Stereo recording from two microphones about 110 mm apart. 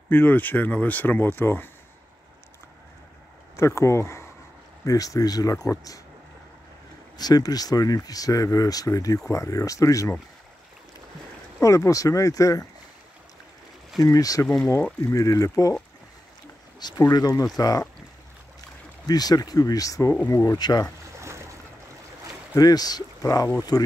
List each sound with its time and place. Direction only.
0.1 s speech: 15° left (ahead or behind)
3.5 s speech: 25° left (ahead or behind)
7.2 s speech: 35° left (ahead or behind)
11.6 s speech: 30° left (ahead or behind)
14.0 s speech: 30° left (ahead or behind)
17.1 s speech: 35° left (ahead or behind)
19.0 s speech: 35° left (ahead or behind)
20.2 s speech: 20° left (ahead or behind)
20.4 s speech: 40° left (ahead or behind)
21.2 s boat: 25° right (ahead or behind)
22.6 s speech: 35° left (ahead or behind)